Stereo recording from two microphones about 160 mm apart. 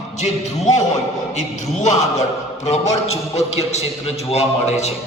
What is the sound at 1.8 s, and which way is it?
Speech, 45° left (ahead or behind).